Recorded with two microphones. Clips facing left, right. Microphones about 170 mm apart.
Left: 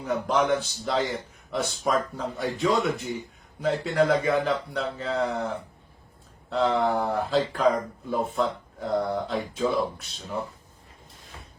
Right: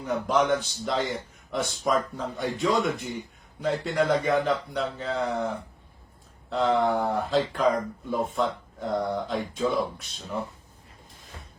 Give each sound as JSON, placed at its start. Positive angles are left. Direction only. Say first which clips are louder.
{"t": 0.0, "sound": "a man's voice", "louder": "even", "side_deg": 0}
{"t": 6.5, "sound": "a man's voice", "louder": "even", "side_deg": 0}